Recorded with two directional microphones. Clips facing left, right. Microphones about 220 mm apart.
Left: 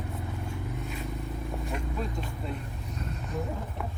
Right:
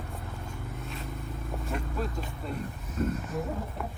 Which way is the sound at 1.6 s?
Centre (ahead or behind).